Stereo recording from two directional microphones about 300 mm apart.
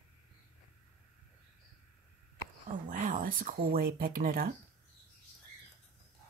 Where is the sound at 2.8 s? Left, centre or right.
Right.